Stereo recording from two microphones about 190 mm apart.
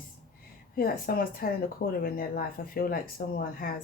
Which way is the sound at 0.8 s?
50° left (ahead or behind).